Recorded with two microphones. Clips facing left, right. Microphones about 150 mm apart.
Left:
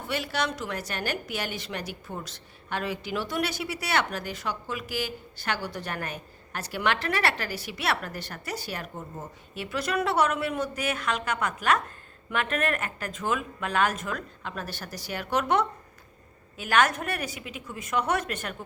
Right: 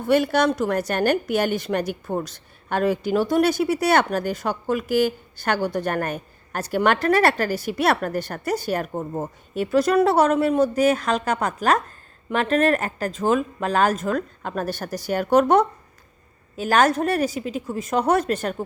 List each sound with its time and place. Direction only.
0.1 s a woman's voice: 50° right (ahead or behind); by 18.5 s 35° right (ahead or behind)